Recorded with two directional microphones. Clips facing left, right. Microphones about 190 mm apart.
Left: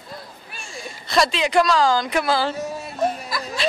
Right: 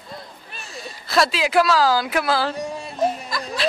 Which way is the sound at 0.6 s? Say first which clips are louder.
Left 1 dB; 5° right (ahead or behind).